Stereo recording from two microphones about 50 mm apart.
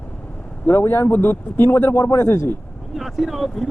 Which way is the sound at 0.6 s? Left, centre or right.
Left.